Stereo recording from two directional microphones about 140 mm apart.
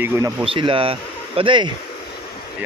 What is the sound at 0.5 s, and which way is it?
Speech, 40° right (ahead or behind).